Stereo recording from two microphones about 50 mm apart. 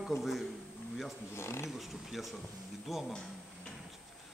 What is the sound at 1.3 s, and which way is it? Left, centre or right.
Speech, left.